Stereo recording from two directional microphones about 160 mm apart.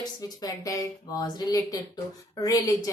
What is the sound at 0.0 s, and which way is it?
A woman's voice, 25° left (ahead or behind).